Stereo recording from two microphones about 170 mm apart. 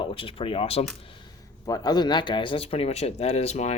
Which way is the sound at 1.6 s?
20° left (ahead or behind).